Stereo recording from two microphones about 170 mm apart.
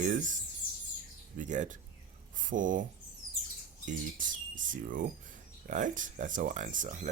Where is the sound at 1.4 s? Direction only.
45° right (ahead or behind).